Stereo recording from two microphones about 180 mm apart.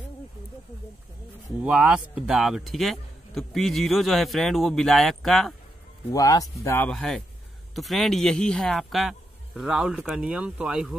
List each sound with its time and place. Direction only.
1.6 s speech: 5° right (ahead or behind)
6.1 s speech: 20° left (ahead or behind)
6.9 s speech: centre (ahead or behind)